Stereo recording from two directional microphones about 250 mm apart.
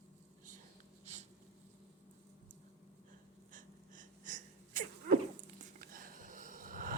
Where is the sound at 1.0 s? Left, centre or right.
Right.